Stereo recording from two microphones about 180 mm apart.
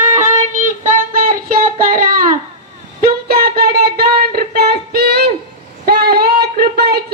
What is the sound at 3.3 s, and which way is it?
Music, 55° right (ahead or behind).